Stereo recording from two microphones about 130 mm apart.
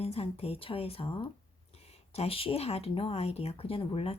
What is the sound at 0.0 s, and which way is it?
Speech, 50° left (ahead or behind).